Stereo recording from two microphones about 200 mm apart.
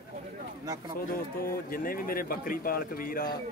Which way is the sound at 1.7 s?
45° left (ahead or behind).